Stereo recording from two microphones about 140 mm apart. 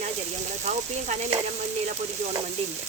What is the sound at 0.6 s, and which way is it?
Speech, 55° right (ahead or behind).